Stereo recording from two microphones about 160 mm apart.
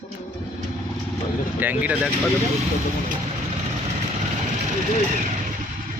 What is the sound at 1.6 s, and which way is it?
Speech, 10° right (ahead or behind).